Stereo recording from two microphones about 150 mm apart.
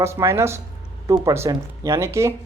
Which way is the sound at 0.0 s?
20° right (ahead or behind).